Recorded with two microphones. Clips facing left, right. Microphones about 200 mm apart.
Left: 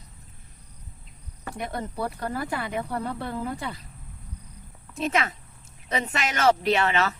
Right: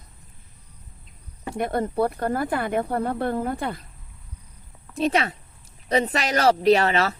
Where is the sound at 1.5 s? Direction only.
55° right (ahead or behind).